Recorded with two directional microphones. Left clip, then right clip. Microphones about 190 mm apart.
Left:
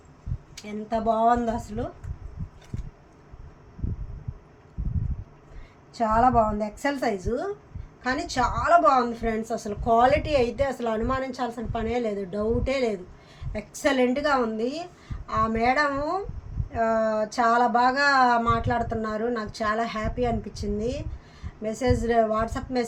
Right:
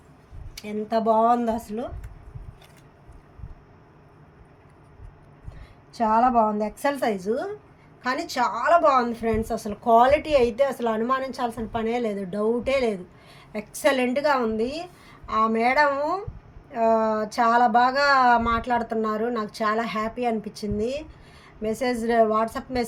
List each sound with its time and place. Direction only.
0.6 s a woman's voice: 45° right (ahead or behind)
5.9 s a woman's voice: 35° right (ahead or behind)